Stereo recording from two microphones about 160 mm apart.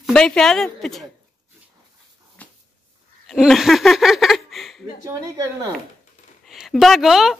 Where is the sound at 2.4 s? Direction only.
10° left (ahead or behind).